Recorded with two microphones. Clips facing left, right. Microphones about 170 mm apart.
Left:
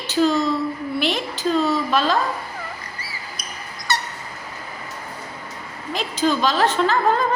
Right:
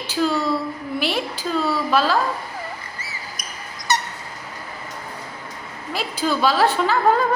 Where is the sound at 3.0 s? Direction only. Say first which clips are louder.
Even; 20° right (ahead or behind).